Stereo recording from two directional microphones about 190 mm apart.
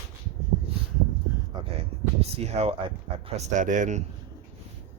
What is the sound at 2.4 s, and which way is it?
Speech, 35° right (ahead or behind).